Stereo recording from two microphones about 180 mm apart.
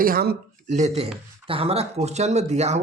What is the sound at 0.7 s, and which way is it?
Speech, 40° right (ahead or behind).